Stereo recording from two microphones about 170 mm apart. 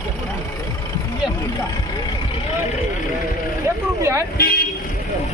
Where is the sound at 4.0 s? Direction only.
15° right (ahead or behind).